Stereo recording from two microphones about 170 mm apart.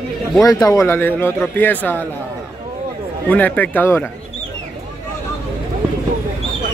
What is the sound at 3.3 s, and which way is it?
Speech, 10° left (ahead or behind).